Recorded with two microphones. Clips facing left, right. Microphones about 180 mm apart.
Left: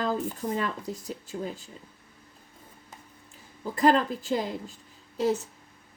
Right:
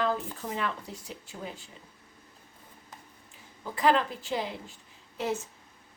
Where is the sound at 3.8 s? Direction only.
40° left (ahead or behind).